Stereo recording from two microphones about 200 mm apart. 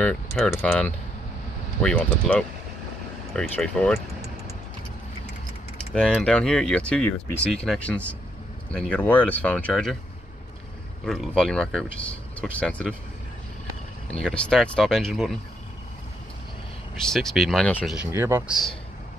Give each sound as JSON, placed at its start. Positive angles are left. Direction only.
{"t": 0.0, "sound": "speech", "side_deg": 5}
{"t": 5.8, "sound": "speech", "side_deg": 5}
{"t": 11.1, "sound": "speech", "side_deg": 0}
{"t": 14.2, "sound": "speech", "side_deg": 5}
{"t": 17.1, "sound": "speech", "side_deg": 0}
{"t": 17.9, "sound": "speech", "side_deg": -10}